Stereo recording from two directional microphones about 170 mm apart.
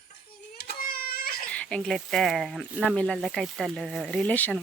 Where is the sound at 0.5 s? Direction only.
60° left (ahead or behind).